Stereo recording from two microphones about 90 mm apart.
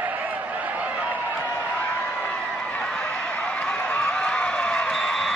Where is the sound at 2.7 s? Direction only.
10° left (ahead or behind).